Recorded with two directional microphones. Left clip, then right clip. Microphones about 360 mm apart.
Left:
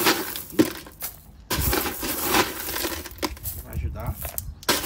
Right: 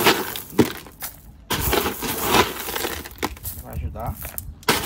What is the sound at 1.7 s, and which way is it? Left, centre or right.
Rub, right.